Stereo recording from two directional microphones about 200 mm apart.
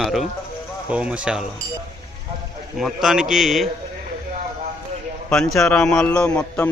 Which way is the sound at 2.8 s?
Centre (ahead or behind).